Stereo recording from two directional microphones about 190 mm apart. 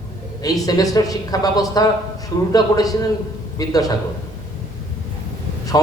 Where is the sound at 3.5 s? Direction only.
20° left (ahead or behind).